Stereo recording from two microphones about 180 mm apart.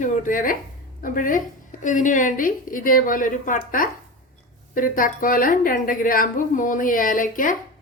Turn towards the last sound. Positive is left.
turn(degrees=50)  # may be behind; listen again after turning